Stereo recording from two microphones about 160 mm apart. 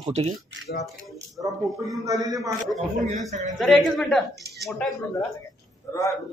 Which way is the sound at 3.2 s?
50° right (ahead or behind).